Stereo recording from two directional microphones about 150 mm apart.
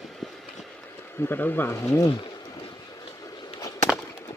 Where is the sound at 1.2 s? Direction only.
15° left (ahead or behind).